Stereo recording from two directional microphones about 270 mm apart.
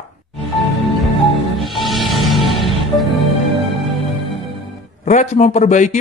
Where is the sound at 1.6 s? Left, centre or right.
Centre.